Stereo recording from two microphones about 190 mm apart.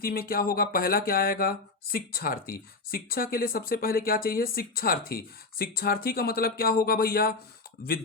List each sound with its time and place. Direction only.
0.0 s speech: 50° left (ahead or behind)